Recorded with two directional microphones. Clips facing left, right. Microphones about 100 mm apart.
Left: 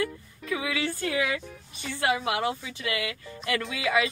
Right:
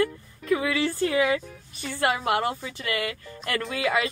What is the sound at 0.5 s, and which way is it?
Speech, 45° right (ahead or behind).